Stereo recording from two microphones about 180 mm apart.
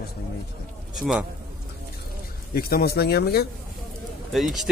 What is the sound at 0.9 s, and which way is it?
Speech, centre (ahead or behind).